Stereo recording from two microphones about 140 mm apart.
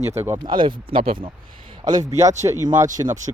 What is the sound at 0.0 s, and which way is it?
Speech, 50° right (ahead or behind).